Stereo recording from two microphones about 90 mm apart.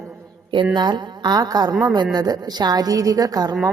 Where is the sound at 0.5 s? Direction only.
60° right (ahead or behind); by 3.5 s 45° right (ahead or behind).